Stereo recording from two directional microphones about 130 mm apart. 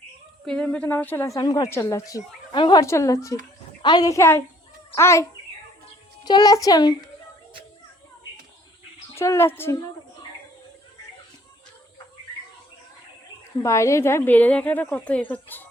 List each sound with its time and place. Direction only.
0.4 s speech: 5° left (ahead or behind)
1.4 s a woman's voice: 30° left (ahead or behind)
2.8 s speech: 25° left (ahead or behind)
6.2 s a woman's voice: 30° left (ahead or behind)
9.1 s speech: 20° left (ahead or behind)
13.6 s speech: 25° left (ahead or behind)